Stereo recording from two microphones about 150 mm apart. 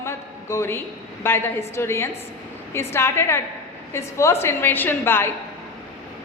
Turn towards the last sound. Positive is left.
turn(degrees=15)  # may be behind; listen again after turning